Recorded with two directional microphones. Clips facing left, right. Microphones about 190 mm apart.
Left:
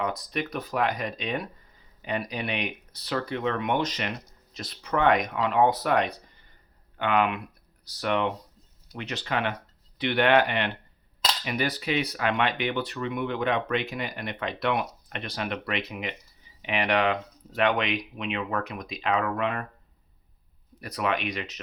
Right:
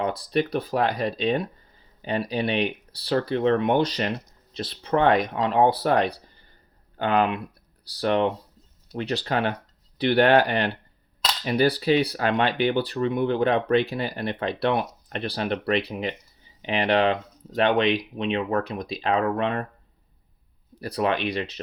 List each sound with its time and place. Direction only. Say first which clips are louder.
0.0 s speech: right 6 dB; 30° right (ahead or behind)
20.7 s speech: right 4 dB; 30° right (ahead or behind)